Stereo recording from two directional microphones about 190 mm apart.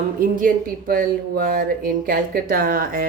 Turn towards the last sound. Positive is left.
turn(degrees=-50)  # may be behind; listen again after turning